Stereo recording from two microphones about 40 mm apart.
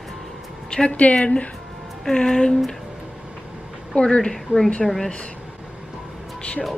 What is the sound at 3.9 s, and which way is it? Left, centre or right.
Speech, left.